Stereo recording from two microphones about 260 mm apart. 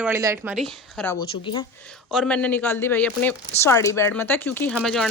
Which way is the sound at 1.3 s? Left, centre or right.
Centre.